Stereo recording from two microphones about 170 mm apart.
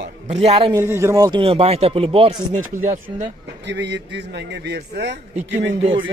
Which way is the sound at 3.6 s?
90° right.